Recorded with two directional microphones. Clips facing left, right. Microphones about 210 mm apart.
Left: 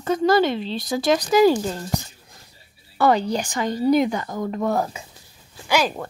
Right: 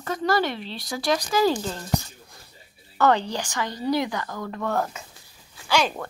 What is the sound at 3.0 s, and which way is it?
Speech, 10° left (ahead or behind).